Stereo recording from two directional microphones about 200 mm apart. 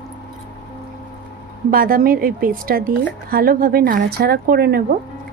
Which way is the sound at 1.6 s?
45° right (ahead or behind).